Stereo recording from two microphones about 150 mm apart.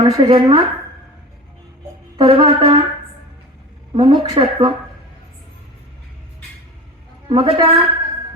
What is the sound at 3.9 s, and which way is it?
Speech, 35° right (ahead or behind).